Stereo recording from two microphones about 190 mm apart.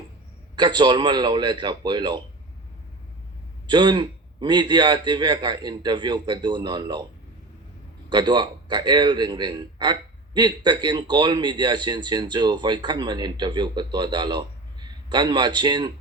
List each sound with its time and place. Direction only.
0.5 s a man's voice: 25° right (ahead or behind)
3.7 s a man's voice: 25° right (ahead or behind)
8.1 s a man's voice: 25° right (ahead or behind)